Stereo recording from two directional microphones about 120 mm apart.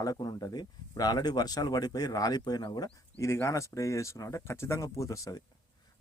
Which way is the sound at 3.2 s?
25° left (ahead or behind).